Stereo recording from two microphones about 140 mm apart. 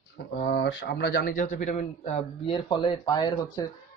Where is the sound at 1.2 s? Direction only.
65° left (ahead or behind).